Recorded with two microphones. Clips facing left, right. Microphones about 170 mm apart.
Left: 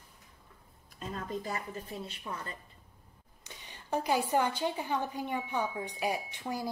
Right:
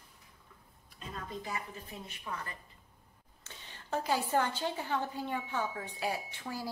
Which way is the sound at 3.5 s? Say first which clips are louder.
Left 3 dB; 15° left (ahead or behind).